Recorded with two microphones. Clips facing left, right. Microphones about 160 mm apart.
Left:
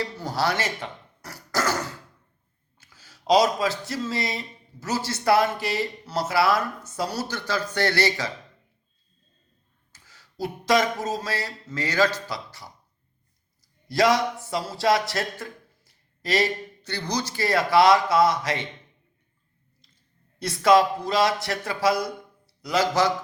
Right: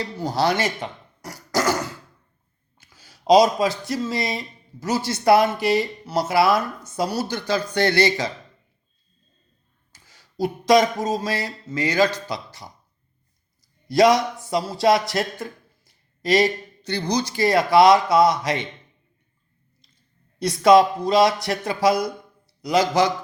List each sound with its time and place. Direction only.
0.0 s cough: 20° right (ahead or behind)
2.7 s speech: 15° right (ahead or behind)
10.4 s speech: 15° right (ahead or behind)
13.8 s speech: 20° right (ahead or behind)
20.4 s speech: 20° right (ahead or behind)